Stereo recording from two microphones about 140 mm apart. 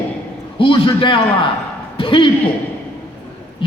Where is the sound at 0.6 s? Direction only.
40° left (ahead or behind).